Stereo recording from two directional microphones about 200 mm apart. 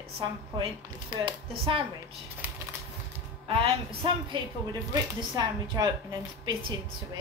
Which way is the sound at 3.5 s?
30° right (ahead or behind).